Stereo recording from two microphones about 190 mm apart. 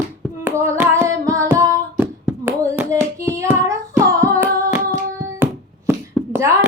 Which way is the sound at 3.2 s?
15° right (ahead or behind).